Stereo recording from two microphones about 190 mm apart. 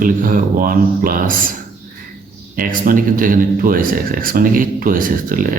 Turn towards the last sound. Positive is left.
turn(degrees=-45)  # may be behind; listen again after turning